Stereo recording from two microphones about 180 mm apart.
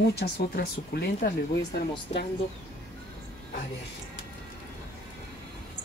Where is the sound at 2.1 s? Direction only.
35° left (ahead or behind).